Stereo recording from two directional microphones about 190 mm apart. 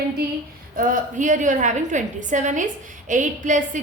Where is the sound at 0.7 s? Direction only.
45° right (ahead or behind).